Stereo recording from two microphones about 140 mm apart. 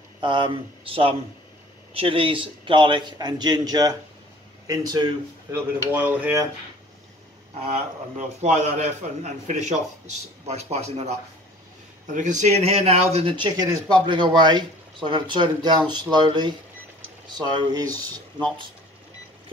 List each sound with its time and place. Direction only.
0.2 s speech: 35° right (ahead or behind)
5.9 s speech: 10° right (ahead or behind)
8.4 s a man's voice: 55° right (ahead or behind)
13.5 s speech: 30° right (ahead or behind)